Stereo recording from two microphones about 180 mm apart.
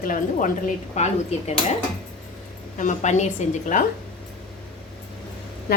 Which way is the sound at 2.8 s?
45° left (ahead or behind).